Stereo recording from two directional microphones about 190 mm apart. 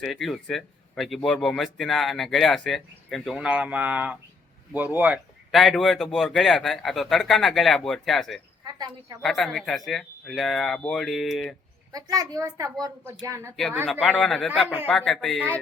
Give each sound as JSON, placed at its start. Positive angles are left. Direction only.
{"t": 0.0, "sound": "speech", "side_deg": 0}
{"t": 8.6, "sound": "a woman's voice", "side_deg": -20}
{"t": 9.2, "sound": "speech", "side_deg": 0}
{"t": 11.9, "sound": "a child's voice", "side_deg": -20}
{"t": 14.0, "sound": "speech", "side_deg": 5}